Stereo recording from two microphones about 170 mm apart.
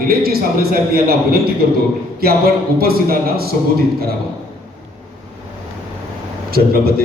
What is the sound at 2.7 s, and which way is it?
Speech, 65° right (ahead or behind).